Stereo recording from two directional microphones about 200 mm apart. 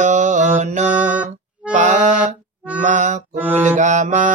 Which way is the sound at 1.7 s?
35° right (ahead or behind).